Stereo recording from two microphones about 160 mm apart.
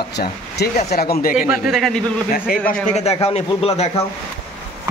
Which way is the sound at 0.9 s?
70° left (ahead or behind).